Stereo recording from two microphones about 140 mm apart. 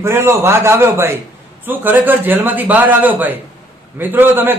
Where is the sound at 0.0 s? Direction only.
20° right (ahead or behind).